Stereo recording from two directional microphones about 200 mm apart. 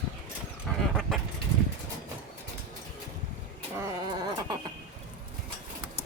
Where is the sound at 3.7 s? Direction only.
15° right (ahead or behind).